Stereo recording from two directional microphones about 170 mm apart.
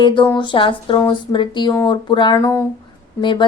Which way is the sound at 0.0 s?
30° left (ahead or behind).